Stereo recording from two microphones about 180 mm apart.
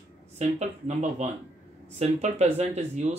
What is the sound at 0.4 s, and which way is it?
Speech, 40° right (ahead or behind).